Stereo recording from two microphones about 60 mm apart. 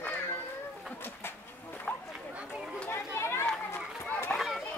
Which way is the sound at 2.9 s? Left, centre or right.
Left.